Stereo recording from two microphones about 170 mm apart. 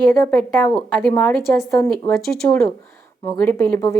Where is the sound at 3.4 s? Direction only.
15° left (ahead or behind).